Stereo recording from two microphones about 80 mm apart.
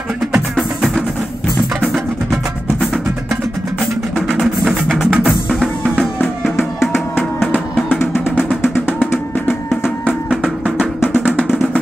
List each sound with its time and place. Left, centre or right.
0.6 s music: centre
4.3 s music: centre
4.8 s music: centre
5.2 s music: centre
6.5 s music: left